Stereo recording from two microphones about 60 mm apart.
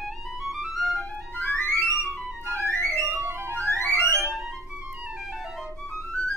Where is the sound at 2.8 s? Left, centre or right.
Right.